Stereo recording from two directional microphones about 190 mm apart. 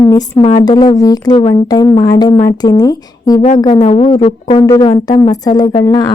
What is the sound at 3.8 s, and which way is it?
Speech, 35° left (ahead or behind).